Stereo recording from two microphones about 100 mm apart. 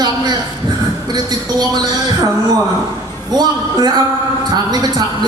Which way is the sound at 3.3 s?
45° right (ahead or behind).